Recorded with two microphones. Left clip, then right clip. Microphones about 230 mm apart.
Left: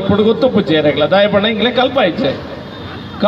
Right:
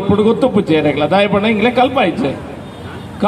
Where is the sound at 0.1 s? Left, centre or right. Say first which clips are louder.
Even; right.